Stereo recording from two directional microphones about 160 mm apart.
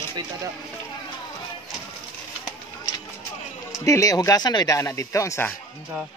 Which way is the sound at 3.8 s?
20° left (ahead or behind).